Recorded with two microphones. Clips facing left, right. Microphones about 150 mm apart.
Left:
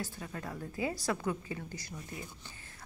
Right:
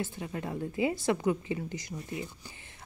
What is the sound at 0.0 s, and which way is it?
A woman's voice, 20° right (ahead or behind).